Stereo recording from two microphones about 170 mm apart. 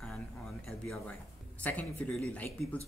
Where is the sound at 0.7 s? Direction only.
Centre (ahead or behind).